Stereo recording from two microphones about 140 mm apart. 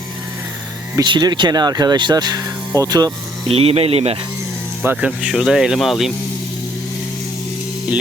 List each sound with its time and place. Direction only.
0.9 s speech: 30° right (ahead or behind)
3.5 s speech: 45° right (ahead or behind)
4.8 s speech: 10° right (ahead or behind)